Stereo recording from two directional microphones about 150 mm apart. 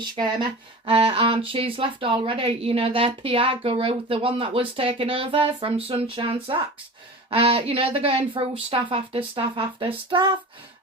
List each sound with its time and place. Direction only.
0.0 s speech: 30° right (ahead or behind)